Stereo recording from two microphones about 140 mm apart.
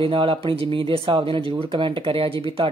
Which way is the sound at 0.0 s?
40° right (ahead or behind).